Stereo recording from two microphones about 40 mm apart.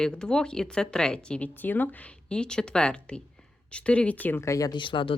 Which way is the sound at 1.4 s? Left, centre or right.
Left.